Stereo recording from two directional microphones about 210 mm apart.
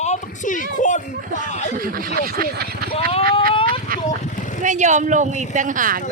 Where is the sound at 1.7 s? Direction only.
45° right (ahead or behind).